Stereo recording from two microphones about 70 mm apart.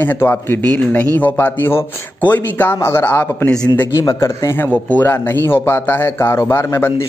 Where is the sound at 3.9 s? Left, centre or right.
Left.